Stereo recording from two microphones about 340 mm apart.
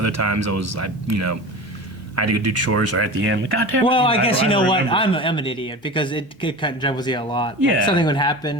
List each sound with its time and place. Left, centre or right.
0.0 s speech: right
3.8 s a man's voice: centre